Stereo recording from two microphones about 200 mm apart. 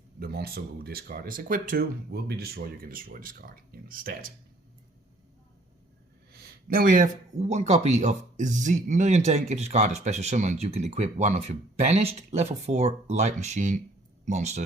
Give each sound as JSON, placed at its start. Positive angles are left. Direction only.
{"t": 0.2, "sound": "speech", "side_deg": -50}
{"t": 6.3, "sound": "speech", "side_deg": -50}